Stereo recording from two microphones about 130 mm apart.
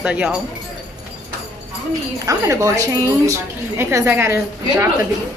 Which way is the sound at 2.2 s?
25° right (ahead or behind).